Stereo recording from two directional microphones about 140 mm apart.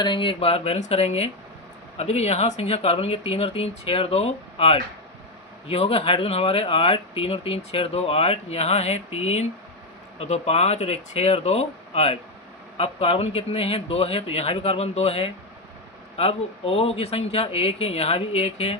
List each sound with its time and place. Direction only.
0.0 s speech: 35° left (ahead or behind)